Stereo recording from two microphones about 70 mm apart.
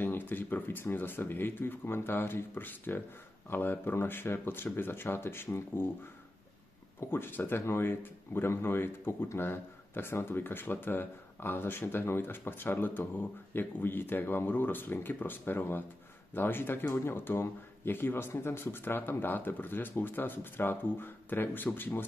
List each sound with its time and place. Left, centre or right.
0.0 s speech: left
7.0 s speech: left